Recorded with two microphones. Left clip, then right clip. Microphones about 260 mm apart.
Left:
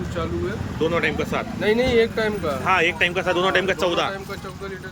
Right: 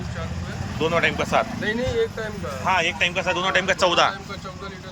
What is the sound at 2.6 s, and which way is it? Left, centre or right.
A man's voice, centre.